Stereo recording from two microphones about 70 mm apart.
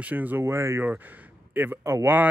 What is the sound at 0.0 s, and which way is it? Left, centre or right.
Speech, right.